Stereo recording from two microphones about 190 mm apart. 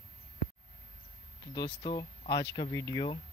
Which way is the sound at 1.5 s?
20° left (ahead or behind).